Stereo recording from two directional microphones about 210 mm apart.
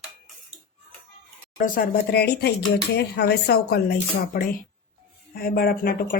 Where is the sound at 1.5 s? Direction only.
40° left (ahead or behind).